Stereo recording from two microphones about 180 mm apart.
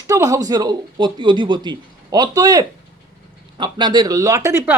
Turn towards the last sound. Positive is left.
turn(degrees=-15)  # may be behind; listen again after turning